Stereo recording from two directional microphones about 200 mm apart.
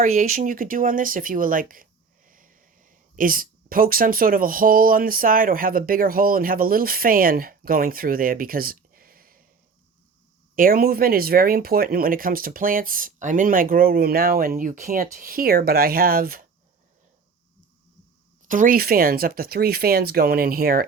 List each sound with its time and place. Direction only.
0.0 s speech: 40° right (ahead or behind)
10.5 s speech: 45° right (ahead or behind)
18.4 s speech: 40° right (ahead or behind)